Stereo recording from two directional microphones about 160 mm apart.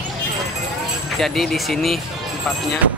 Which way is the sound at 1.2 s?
Centre (ahead or behind).